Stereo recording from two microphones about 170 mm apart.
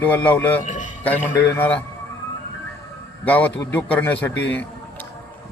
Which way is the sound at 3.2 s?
10° left (ahead or behind).